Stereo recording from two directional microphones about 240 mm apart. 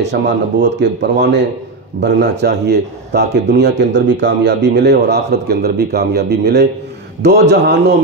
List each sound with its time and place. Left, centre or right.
0.0 s a man's voice: right